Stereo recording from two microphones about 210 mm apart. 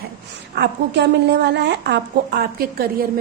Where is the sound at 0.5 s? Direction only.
55° right (ahead or behind).